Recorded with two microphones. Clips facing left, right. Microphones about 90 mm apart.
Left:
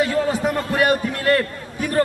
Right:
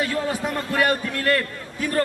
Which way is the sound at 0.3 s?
20° left (ahead or behind).